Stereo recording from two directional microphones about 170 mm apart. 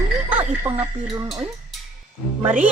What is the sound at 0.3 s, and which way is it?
Speech, 10° right (ahead or behind).